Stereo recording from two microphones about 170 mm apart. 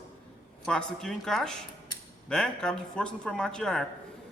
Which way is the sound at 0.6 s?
5° left (ahead or behind).